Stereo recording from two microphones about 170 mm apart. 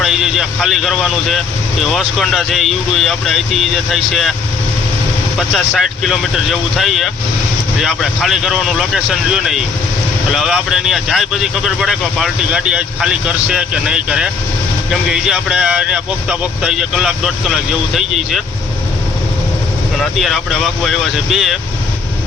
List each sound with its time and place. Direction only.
0.0 s speech: centre (ahead or behind)
5.4 s speech: centre (ahead or behind)
20.0 s speech: centre (ahead or behind)